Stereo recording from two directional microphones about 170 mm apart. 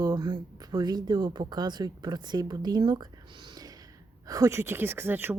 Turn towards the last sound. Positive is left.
turn(degrees=-10)  # may be behind; listen again after turning